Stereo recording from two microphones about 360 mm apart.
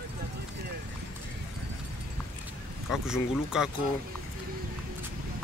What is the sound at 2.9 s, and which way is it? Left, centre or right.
Speech, centre.